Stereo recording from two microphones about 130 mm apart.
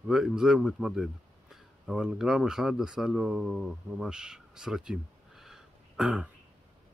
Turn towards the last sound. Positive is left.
turn(degrees=-10)  # may be behind; listen again after turning